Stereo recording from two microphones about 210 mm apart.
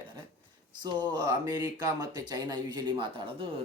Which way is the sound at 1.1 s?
20° right (ahead or behind).